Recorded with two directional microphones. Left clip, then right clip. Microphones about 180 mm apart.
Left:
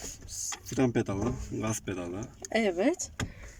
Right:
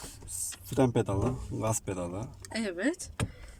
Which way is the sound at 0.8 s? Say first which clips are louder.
Right 2 dB; 20° right (ahead or behind).